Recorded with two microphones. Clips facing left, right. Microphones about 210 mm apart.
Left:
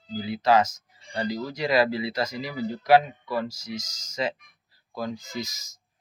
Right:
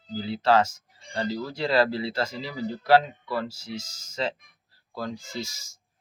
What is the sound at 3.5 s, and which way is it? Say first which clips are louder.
Speech: left 1 dB; 40° left (ahead or behind).